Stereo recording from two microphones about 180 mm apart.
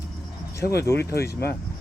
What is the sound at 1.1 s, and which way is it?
Speech, 60° left (ahead or behind).